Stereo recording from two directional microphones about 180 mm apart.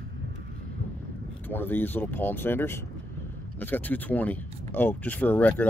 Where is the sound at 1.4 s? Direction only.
10° left (ahead or behind).